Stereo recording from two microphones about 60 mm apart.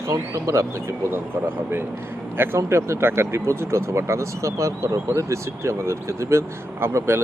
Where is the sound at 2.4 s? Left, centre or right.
Right.